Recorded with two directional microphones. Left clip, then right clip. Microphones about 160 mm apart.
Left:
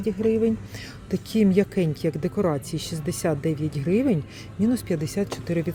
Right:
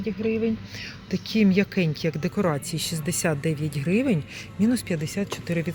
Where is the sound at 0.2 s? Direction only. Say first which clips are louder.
Left 3 dB; 40° left (ahead or behind).